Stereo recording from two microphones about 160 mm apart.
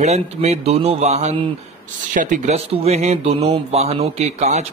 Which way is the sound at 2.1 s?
50° right (ahead or behind).